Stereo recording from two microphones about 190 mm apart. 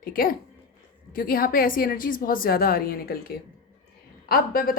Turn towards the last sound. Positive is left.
turn(degrees=50)  # may be behind; listen again after turning